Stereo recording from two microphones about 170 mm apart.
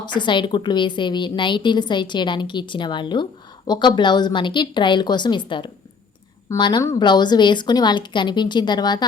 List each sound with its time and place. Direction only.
0.0 s a woman's voice: 25° left (ahead or behind)